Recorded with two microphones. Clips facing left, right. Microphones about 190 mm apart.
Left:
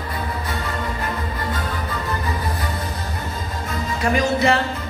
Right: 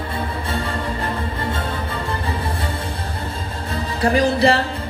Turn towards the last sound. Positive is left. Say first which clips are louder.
# right 2 dB
turn(degrees=-30)  # may be behind; listen again after turning